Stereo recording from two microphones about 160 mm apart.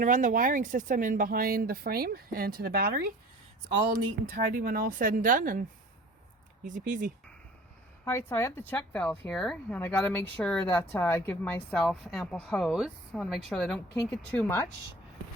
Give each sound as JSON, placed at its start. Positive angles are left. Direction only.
{"t": 0.0, "sound": "speech", "side_deg": -55}
{"t": 3.9, "sound": "speech", "side_deg": -60}
{"t": 6.7, "sound": "speech", "side_deg": -50}
{"t": 8.0, "sound": "a woman's voice", "side_deg": 15}